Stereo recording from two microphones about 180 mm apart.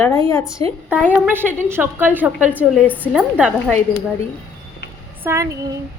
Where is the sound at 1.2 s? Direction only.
10° right (ahead or behind).